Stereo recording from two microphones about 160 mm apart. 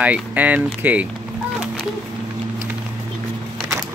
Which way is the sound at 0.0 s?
10° right (ahead or behind).